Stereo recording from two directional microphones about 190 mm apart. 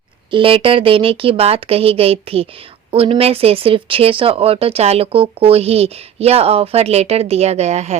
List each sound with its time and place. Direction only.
0.3 s speech: 25° right (ahead or behind)